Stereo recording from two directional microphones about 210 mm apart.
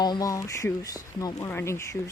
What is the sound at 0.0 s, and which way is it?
Speech, 20° left (ahead or behind).